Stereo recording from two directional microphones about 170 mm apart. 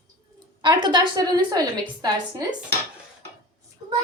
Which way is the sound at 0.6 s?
25° right (ahead or behind).